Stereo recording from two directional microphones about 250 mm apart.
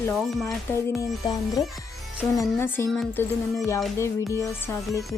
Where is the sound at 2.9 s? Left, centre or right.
Centre.